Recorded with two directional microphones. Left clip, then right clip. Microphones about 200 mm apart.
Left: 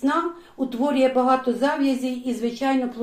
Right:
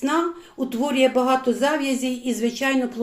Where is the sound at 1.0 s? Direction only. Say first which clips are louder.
Right 1 dB; 45° right (ahead or behind).